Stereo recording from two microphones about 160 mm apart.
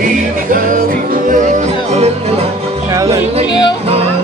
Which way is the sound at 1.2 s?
50° right (ahead or behind).